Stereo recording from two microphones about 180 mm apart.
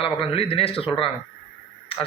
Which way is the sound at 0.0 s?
30° left (ahead or behind).